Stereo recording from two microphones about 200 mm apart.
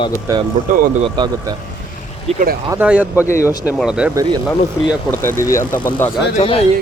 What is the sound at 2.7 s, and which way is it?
Speech, 5° right (ahead or behind).